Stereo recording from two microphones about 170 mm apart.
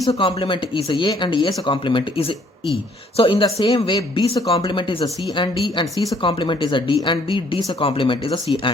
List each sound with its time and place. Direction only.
0.2 s speech: 30° left (ahead or behind)